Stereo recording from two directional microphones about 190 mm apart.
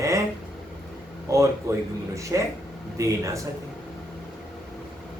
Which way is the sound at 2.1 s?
15° right (ahead or behind).